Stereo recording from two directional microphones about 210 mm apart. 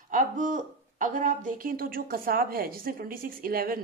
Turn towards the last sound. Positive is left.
turn(degrees=-45)  # may be behind; listen again after turning